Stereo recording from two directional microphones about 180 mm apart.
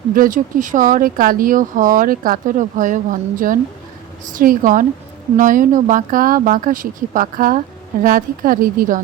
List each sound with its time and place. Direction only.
0.1 s speech: 50° right (ahead or behind)